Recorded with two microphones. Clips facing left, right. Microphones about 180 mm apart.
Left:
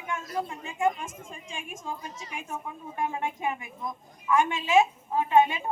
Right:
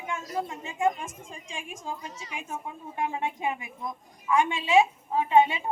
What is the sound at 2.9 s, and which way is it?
Speech, 20° right (ahead or behind).